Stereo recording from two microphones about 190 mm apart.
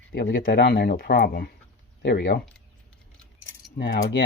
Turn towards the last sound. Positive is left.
turn(degrees=65)  # may be behind; listen again after turning